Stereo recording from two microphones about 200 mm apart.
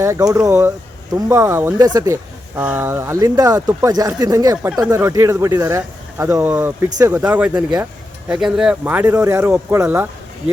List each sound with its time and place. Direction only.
0.0 s speech: 15° right (ahead or behind)
4.5 s speech: 5° right (ahead or behind)